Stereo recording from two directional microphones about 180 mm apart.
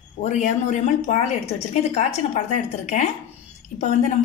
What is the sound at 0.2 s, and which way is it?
Speech, 40° left (ahead or behind).